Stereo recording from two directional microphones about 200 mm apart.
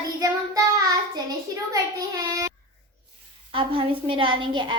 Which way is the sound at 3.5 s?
25° right (ahead or behind).